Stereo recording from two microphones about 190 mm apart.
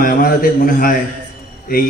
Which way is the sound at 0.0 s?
50° left (ahead or behind).